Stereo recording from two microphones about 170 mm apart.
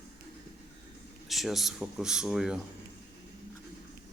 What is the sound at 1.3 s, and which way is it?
A man's voice, centre (ahead or behind).